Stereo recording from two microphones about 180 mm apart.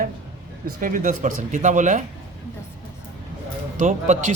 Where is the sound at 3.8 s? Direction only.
40° right (ahead or behind).